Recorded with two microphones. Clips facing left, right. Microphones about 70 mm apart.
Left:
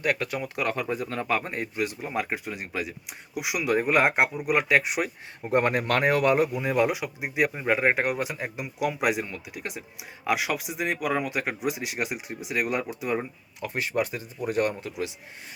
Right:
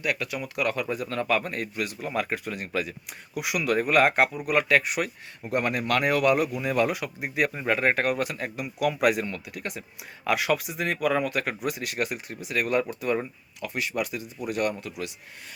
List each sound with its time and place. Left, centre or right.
0.0 s speech: left; by 13.2 s centre
13.6 s speech: left